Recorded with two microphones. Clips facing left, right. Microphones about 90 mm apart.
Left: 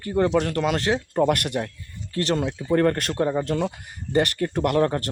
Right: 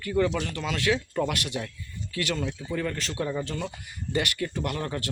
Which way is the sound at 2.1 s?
40° left (ahead or behind).